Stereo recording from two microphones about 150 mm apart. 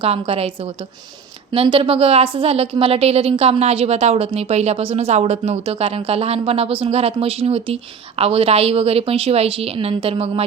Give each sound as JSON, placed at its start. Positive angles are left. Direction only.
{"t": 0.0, "sound": "a woman's voice", "side_deg": -40}